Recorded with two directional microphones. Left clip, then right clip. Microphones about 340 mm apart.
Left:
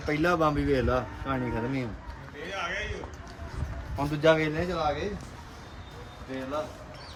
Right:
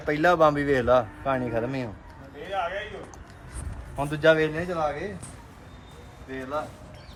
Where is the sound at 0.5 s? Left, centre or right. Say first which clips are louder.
Right 3 dB; right.